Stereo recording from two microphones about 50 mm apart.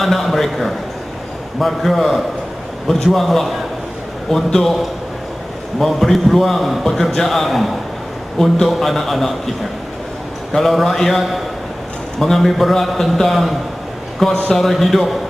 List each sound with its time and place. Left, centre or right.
0.0 s a man's voice: centre
10.5 s a man's voice: centre